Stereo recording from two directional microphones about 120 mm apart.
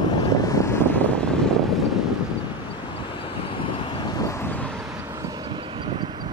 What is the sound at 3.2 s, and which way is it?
Vehicle, 45° left (ahead or behind).